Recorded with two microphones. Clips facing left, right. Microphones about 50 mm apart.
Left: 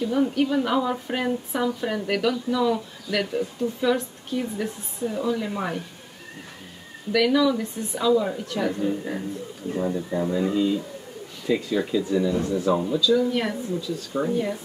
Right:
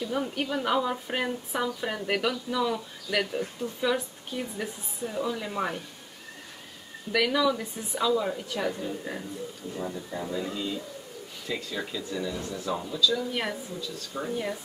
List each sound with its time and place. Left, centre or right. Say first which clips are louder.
0.3 s a woman's voice: left 5 dB; centre
7.1 s a woman's voice: left 5 dB; centre
13.3 s a woman's voice: left 5 dB; centre
13.7 s speech: left 8 dB; centre
14.3 s a woman's voice: left 3 dB; centre